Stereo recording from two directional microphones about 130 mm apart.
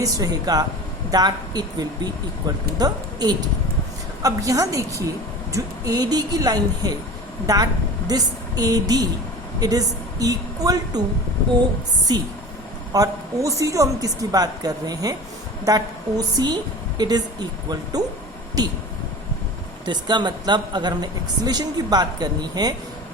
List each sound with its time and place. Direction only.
0.0 s a woman's voice: 30° right (ahead or behind)
12.1 s a woman's voice: 30° right (ahead or behind)
19.8 s a woman's voice: 35° right (ahead or behind)